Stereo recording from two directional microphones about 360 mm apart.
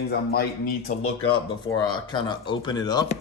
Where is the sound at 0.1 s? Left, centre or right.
Left.